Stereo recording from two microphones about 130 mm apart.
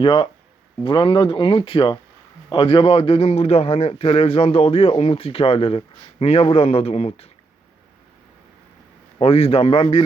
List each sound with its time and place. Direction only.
0.0 s a man's voice: 40° left (ahead or behind)
9.2 s a man's voice: 50° left (ahead or behind)